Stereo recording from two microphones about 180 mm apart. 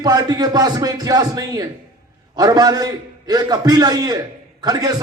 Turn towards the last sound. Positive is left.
turn(degrees=-20)  # may be behind; listen again after turning